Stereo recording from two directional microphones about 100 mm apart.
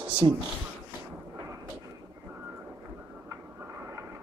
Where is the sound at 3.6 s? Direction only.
25° right (ahead or behind).